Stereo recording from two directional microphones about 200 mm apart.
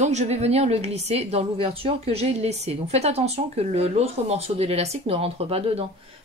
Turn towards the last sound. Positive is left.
turn(degrees=-30)  # may be behind; listen again after turning